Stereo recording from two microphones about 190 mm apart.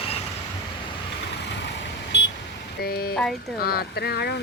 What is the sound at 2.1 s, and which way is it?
Vehicle, 70° left (ahead or behind).